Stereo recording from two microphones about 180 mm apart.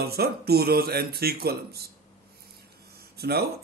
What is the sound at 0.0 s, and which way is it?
A man's voice, 60° right (ahead or behind).